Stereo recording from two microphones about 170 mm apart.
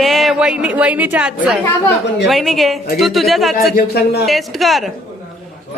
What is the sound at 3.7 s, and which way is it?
Speech, 65° left (ahead or behind).